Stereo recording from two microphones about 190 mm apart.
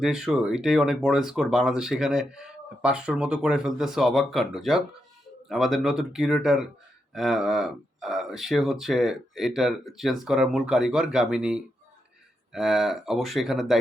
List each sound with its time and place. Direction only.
0.0 s speech: centre (ahead or behind)